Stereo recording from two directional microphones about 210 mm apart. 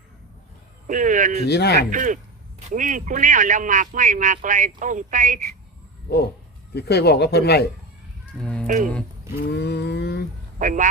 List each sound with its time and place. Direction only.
0.9 s speech: 40° right (ahead or behind)
1.5 s speech: 50° left (ahead or behind)
1.9 s speech: 40° right (ahead or behind)
6.7 s speech: 50° left (ahead or behind)
8.4 s speech: 5° left (ahead or behind)
8.6 s speech: 40° right (ahead or behind)
9.4 s speech: 50° left (ahead or behind)
10.6 s speech: 40° right (ahead or behind)